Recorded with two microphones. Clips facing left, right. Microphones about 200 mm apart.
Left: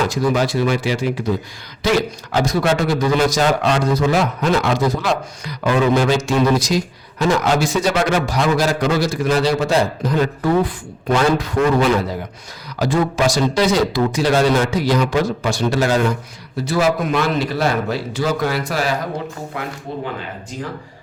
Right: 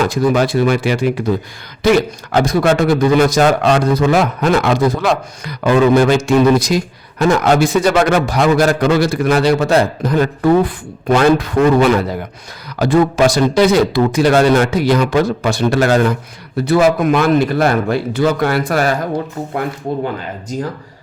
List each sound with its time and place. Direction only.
0.0 s a man's voice: 55° right (ahead or behind)
20.5 s speech: 40° right (ahead or behind)